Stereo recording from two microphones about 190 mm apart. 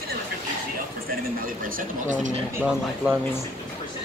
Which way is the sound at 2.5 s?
10° right (ahead or behind).